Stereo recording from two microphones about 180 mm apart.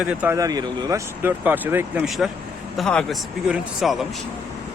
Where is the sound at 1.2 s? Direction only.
10° right (ahead or behind).